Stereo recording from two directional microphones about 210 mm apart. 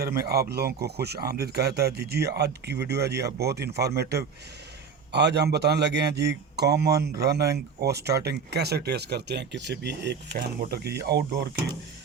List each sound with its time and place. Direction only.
0.0 s a man's voice: 50° right (ahead or behind)